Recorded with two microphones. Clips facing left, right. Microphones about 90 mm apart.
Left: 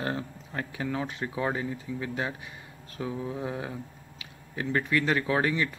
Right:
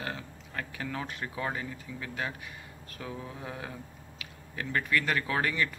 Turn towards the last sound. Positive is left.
turn(degrees=20)  # may be behind; listen again after turning